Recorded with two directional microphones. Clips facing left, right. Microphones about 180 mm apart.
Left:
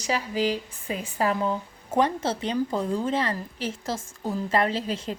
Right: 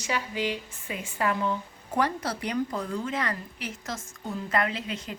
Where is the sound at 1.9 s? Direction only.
20° left (ahead or behind).